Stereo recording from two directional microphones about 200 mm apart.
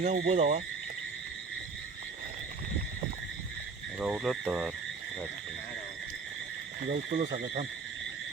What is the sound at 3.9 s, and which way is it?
Speech, 5° right (ahead or behind).